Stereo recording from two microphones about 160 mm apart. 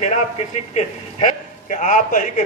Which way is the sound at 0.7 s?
45° left (ahead or behind).